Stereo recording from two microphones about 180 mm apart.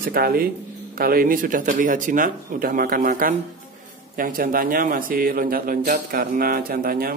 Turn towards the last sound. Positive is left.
turn(degrees=-55)  # may be behind; listen again after turning